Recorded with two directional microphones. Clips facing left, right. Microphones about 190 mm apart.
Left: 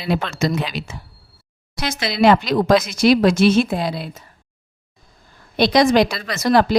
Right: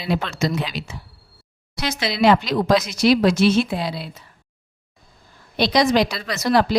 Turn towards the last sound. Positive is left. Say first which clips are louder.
# left 2 dB
turn(degrees=50)  # may be behind; listen again after turning